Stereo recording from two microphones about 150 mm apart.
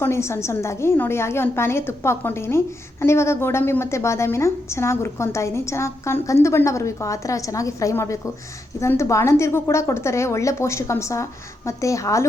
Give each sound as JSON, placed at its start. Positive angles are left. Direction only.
{"t": 0.0, "sound": "a woman's voice", "side_deg": 15}